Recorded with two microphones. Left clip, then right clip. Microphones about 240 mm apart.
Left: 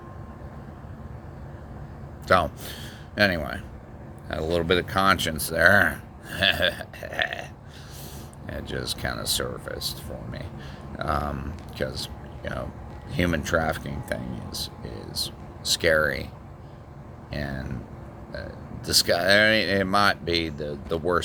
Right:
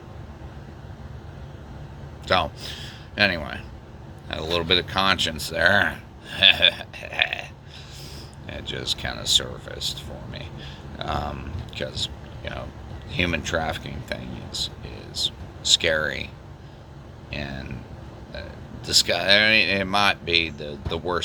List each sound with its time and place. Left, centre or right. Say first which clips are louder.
2.2 s a man's voice: left 1 dB; left
8.4 s speech: right 3 dB; left
10.9 s speech: left 1 dB; left
13.1 s speech: right 1 dB; left
15.7 s speech: right 1 dB; left
17.3 s speech: even; left
18.9 s speech: right 1 dB; left